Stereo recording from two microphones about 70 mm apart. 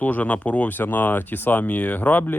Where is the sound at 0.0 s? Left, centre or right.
Left.